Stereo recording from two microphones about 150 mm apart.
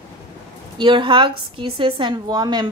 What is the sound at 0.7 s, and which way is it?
A woman's voice, 35° right (ahead or behind).